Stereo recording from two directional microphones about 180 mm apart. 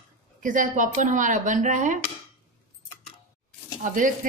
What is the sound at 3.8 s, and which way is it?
Speech, 45° right (ahead or behind).